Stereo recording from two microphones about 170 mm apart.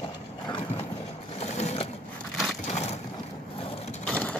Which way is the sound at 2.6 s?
40° left (ahead or behind).